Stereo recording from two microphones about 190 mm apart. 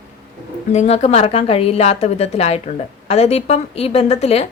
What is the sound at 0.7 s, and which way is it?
A woman's voice, 35° left (ahead or behind).